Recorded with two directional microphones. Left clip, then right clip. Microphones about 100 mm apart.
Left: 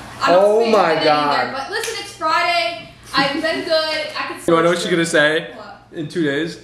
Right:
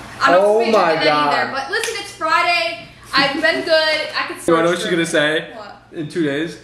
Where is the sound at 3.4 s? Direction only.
15° right (ahead or behind).